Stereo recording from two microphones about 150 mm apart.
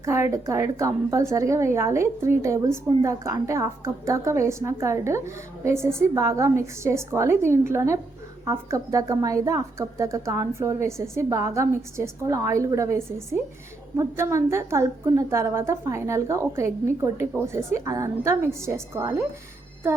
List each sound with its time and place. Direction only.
0.0 s a woman's voice: 20° right (ahead or behind)